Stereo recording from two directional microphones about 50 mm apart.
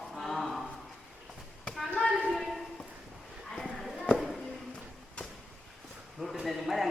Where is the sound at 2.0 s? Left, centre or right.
Centre.